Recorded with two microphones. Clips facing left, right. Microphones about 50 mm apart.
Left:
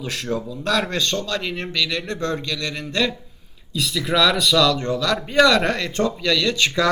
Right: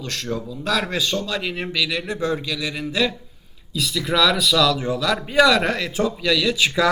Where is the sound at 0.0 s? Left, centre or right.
Centre.